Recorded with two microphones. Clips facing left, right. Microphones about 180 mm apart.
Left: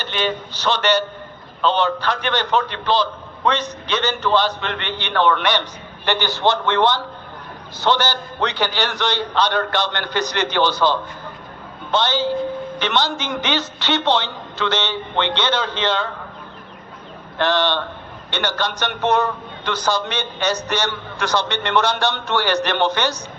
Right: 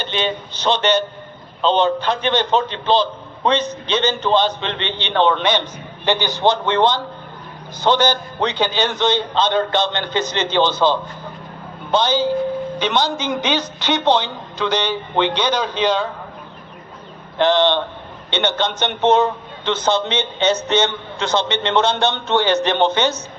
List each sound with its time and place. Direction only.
0.0 s a man's voice: 20° right (ahead or behind)
17.3 s a man's voice: 20° right (ahead or behind)